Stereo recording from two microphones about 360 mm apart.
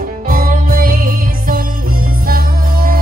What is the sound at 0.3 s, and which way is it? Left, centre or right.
Music, right.